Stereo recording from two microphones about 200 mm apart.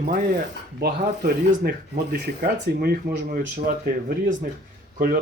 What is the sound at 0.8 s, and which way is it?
Speech, 50° right (ahead or behind).